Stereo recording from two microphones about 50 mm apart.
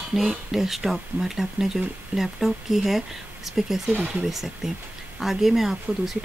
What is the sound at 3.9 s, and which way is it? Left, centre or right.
Speech, right.